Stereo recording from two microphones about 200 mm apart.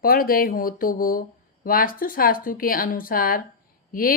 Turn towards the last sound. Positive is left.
turn(degrees=45)  # may be behind; listen again after turning